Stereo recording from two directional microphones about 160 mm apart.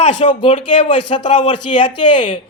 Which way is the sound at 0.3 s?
30° left (ahead or behind).